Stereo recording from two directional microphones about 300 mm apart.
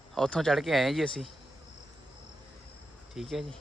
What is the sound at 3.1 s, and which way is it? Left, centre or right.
Speech, centre.